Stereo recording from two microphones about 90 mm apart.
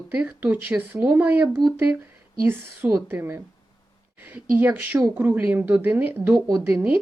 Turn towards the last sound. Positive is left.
turn(degrees=-20)  # may be behind; listen again after turning